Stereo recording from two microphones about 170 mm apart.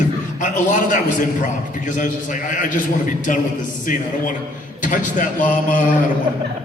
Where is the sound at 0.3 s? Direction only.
45° left (ahead or behind).